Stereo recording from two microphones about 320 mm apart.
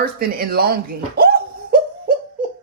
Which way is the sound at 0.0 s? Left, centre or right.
Right.